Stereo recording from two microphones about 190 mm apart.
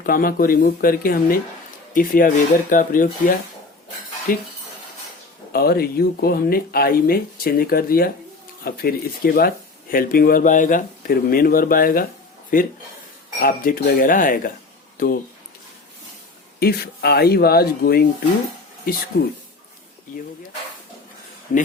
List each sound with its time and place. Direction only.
0.0 s speech: 50° left (ahead or behind)
5.5 s speech: 55° left (ahead or behind)
16.6 s speech: 55° left (ahead or behind)